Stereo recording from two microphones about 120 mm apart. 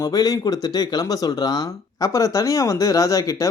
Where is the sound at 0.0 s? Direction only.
30° left (ahead or behind).